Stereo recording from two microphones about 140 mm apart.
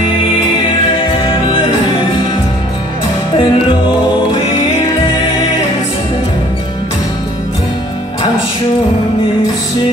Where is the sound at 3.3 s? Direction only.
35° left (ahead or behind).